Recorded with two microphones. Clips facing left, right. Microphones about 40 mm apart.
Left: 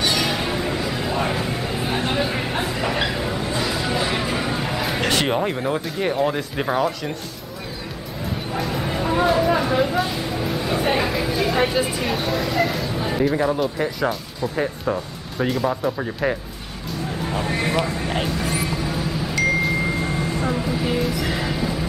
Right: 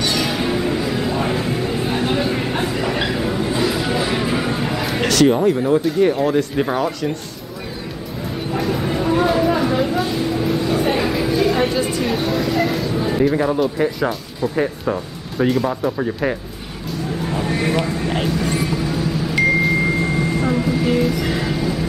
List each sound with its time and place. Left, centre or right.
0.0 s music: centre
5.1 s speech: left; by 7.1 s centre
8.5 s a sound: centre
17.2 s vehicle: centre
19.6 s music: centre